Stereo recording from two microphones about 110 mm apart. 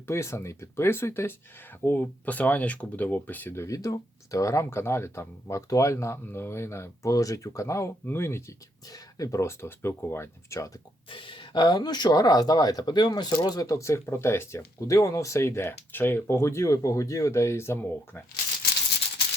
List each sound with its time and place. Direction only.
0.1 s speech: 25° left (ahead or behind)
11.1 s speech: 50° left (ahead or behind); by 18.2 s 20° left (ahead or behind)